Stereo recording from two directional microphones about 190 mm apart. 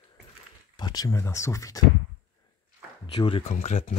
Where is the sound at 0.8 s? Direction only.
20° left (ahead or behind).